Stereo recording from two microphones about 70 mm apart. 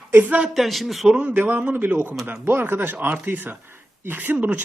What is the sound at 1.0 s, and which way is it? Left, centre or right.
Speech, centre.